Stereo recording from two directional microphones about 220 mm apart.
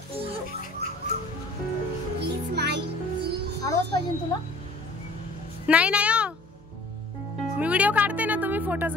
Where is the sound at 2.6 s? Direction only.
50° right (ahead or behind).